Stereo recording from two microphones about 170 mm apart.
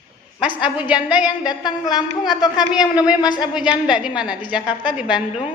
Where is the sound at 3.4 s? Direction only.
5° right (ahead or behind).